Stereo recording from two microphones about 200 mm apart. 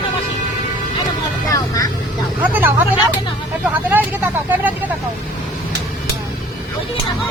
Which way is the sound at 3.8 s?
10° right (ahead or behind).